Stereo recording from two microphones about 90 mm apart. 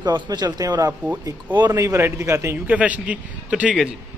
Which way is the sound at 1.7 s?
30° right (ahead or behind).